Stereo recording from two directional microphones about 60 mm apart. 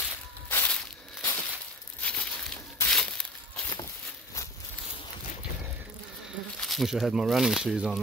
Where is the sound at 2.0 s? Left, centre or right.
Left.